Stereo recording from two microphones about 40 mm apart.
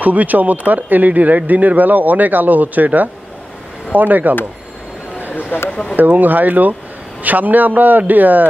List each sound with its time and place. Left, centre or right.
0.0 s speech: right
5.3 s speech: left
5.9 s speech: right